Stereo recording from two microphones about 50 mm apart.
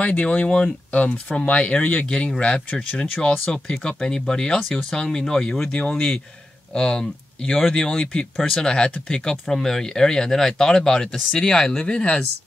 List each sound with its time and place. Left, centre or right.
0.0 s speech: left